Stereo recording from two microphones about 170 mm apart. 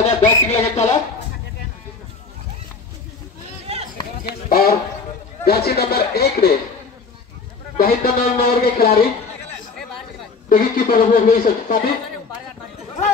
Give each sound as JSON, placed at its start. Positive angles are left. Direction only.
{"t": 0.0, "sound": "a sound", "side_deg": 40}
{"t": 4.2, "sound": "speech", "side_deg": 60}
{"t": 7.7, "sound": "speech", "side_deg": 60}
{"t": 10.5, "sound": "speech", "side_deg": 55}